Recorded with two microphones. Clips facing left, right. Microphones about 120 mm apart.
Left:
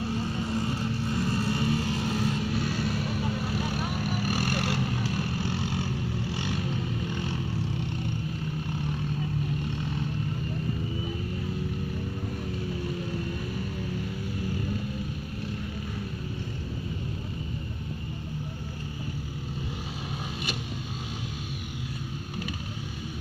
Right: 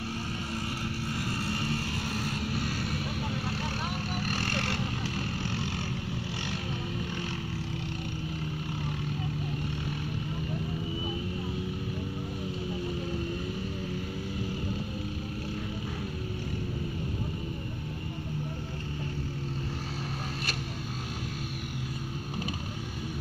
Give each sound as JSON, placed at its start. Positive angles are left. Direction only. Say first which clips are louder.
{"t": 0.1, "sound": "vehicle", "louder": "left 6 dB", "side_deg": 20}
{"t": 4.3, "sound": "vehicle", "louder": "left 4 dB", "side_deg": 15}